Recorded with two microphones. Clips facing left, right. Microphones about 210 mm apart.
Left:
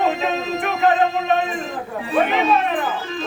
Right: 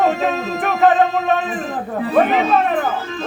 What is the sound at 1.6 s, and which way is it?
Speech, 50° right (ahead or behind).